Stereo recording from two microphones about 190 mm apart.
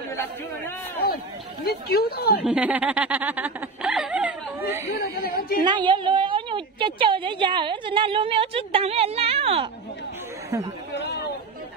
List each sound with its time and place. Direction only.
1.0 s a sound: 55° left (ahead or behind)
2.4 s speech: 5° right (ahead or behind)
4.9 s speech: 55° left (ahead or behind)
5.6 s a woman's voice: 25° right (ahead or behind)
10.9 s speech: 65° left (ahead or behind)